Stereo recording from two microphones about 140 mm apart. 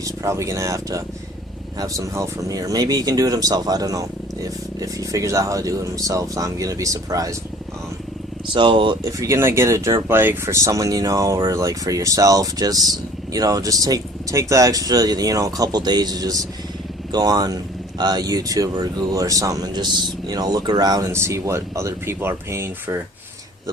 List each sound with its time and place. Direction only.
0.0 s speech: 20° right (ahead or behind)
8.5 s speech: 35° right (ahead or behind); by 23.0 s 20° right (ahead or behind)